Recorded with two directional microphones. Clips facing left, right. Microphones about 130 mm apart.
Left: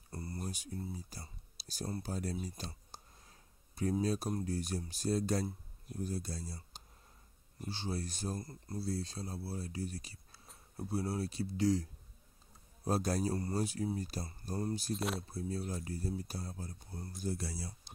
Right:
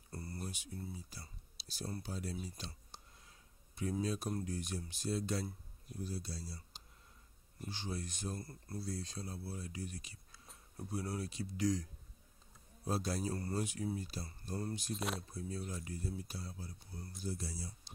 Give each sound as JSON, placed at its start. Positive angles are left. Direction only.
{"t": 0.1, "sound": "a sound", "side_deg": 25}
{"t": 0.4, "sound": "a sound", "side_deg": 40}
{"t": 1.1, "sound": "speech", "side_deg": 45}
{"t": 2.9, "sound": "a sound", "side_deg": 40}
{"t": 4.0, "sound": "speech", "side_deg": 40}
{"t": 7.7, "sound": "speech", "side_deg": 35}
{"t": 8.4, "sound": "speech", "side_deg": 20}
{"t": 12.8, "sound": "speech", "side_deg": 45}
{"t": 15.0, "sound": "speech", "side_deg": 0}
{"t": 15.3, "sound": "speech", "side_deg": 35}
{"t": 17.2, "sound": "speech", "side_deg": 60}